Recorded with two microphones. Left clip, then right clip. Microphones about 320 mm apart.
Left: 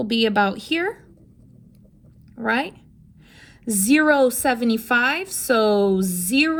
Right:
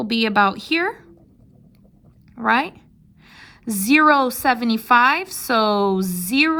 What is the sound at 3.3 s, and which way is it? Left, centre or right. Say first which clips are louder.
A woman's voice: left 1 dB; centre.